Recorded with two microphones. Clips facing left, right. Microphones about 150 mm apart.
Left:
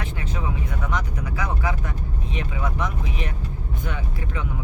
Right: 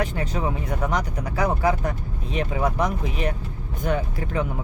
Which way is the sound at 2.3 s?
40° right (ahead or behind).